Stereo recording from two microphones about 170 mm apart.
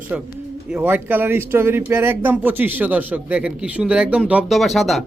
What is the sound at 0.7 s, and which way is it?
Speech, 10° right (ahead or behind).